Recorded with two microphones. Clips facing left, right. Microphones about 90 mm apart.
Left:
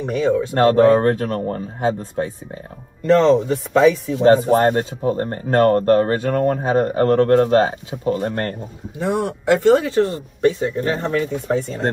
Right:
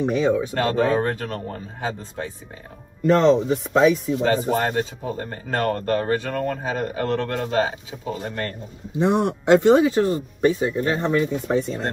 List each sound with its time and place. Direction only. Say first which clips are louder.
0.0 s a man's voice: left 1 dB; 15° right (ahead or behind)
0.6 s speech: left 7 dB; 55° left (ahead or behind)
3.0 s a man's voice: left 3 dB; 5° right (ahead or behind)
4.5 s speech: left 6 dB; 50° left (ahead or behind)
8.9 s a man's voice: right 1 dB; 20° right (ahead or behind)